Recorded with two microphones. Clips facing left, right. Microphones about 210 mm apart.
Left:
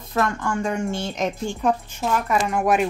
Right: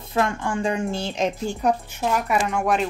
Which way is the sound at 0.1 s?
25° right (ahead or behind).